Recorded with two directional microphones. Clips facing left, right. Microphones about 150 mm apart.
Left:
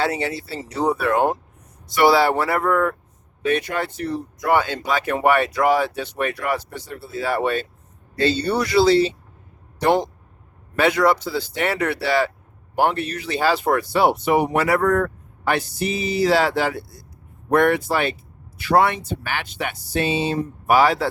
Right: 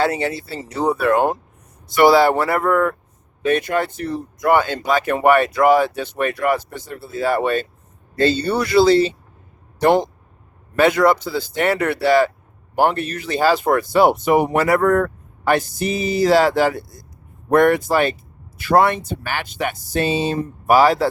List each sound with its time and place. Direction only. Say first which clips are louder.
0.0 s speech: right 3 dB; 50° right (ahead or behind)